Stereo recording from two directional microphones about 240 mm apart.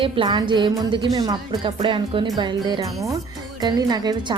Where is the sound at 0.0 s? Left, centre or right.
Centre.